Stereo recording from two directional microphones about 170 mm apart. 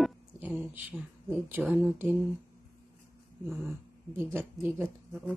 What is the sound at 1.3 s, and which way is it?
Speech, 5° right (ahead or behind).